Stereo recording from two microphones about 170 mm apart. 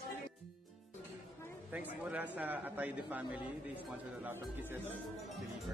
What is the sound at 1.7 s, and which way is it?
A man's voice, 10° right (ahead or behind).